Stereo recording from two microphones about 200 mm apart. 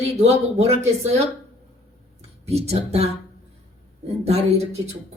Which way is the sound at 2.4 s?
30° right (ahead or behind).